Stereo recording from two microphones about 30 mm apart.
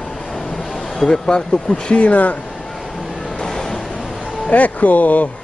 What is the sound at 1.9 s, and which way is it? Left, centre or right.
Speech, left.